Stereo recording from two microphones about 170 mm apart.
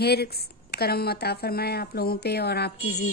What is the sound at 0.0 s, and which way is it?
A woman's voice, 70° left (ahead or behind).